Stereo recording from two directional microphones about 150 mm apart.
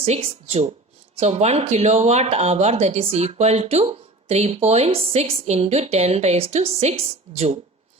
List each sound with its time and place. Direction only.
0.0 s speech: 40° right (ahead or behind)